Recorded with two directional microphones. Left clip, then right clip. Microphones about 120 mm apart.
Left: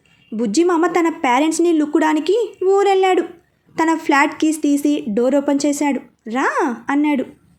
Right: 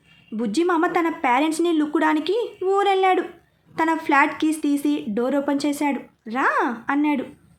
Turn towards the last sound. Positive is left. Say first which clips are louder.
# left 4 dB
turn(degrees=35)  # may be behind; listen again after turning